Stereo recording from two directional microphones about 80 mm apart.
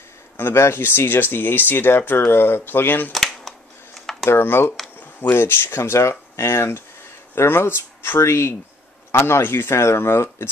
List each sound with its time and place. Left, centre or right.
0.4 s speech: left
3.1 s a sound: centre
4.3 s speech: left